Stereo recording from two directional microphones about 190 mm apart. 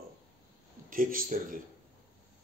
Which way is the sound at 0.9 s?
45° right (ahead or behind).